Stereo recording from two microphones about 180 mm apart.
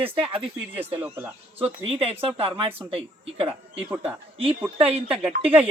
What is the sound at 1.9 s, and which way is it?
Speech, 35° right (ahead or behind).